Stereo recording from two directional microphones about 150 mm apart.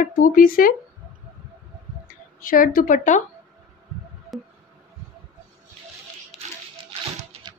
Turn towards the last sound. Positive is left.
turn(degrees=-5)  # may be behind; listen again after turning